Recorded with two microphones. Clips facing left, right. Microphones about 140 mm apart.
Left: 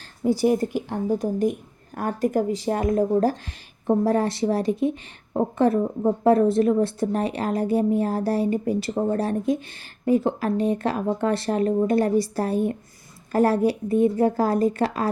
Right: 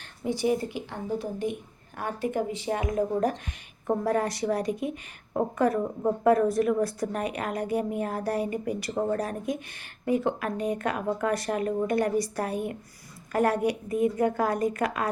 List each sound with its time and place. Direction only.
0.4 s a woman's voice: 45° left (ahead or behind)